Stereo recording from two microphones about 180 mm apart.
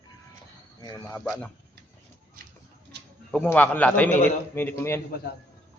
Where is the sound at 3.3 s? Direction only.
5° left (ahead or behind).